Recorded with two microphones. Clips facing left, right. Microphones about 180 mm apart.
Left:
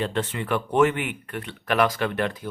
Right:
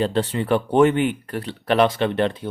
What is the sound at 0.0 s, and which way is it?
Speech, 35° right (ahead or behind).